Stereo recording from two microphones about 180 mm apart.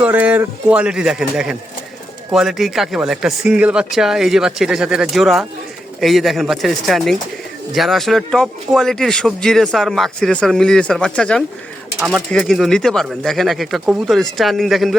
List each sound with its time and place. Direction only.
0.0 s a man's voice: 10° right (ahead or behind)